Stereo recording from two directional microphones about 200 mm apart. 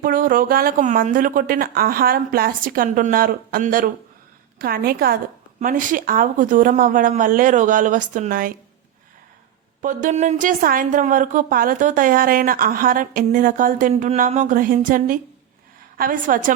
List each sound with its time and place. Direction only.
0.0 s a woman's voice: 45° right (ahead or behind)
9.8 s a woman's voice: 40° right (ahead or behind)